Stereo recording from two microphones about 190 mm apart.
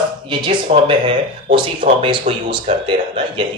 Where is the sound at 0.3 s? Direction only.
25° right (ahead or behind).